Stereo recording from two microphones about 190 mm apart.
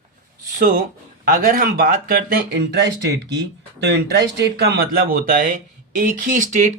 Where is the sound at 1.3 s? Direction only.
50° right (ahead or behind).